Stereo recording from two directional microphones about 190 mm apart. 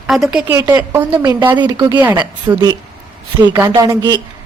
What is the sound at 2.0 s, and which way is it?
Speech, 10° right (ahead or behind).